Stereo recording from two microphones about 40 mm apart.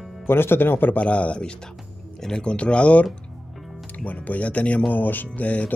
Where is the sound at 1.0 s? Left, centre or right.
Left.